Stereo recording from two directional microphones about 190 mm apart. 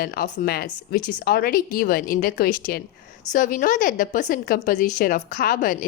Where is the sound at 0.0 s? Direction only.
50° left (ahead or behind).